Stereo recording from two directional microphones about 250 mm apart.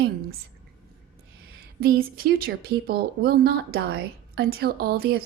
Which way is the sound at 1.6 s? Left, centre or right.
Right.